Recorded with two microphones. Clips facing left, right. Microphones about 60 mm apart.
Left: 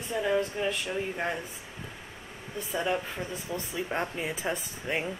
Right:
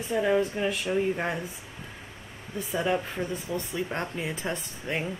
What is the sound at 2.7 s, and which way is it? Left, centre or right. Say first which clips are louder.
Speech: right 2 dB; centre.